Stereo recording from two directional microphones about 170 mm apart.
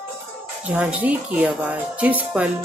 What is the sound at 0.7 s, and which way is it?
Speech, 10° right (ahead or behind).